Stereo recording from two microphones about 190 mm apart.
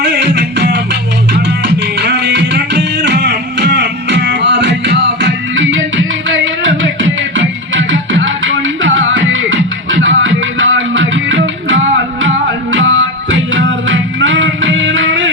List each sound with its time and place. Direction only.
0.0 s music: 65° right (ahead or behind); by 15.3 s 90° right